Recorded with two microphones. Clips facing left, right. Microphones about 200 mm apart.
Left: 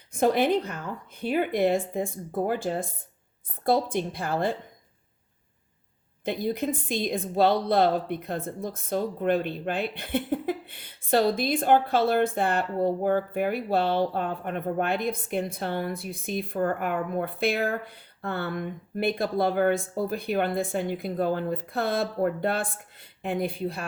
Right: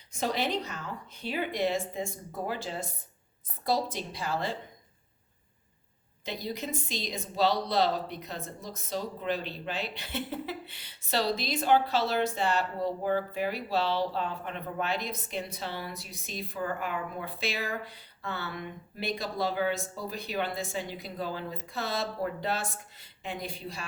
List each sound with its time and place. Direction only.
0.1 s a woman's voice: 55° left (ahead or behind)
6.2 s a woman's voice: 55° left (ahead or behind)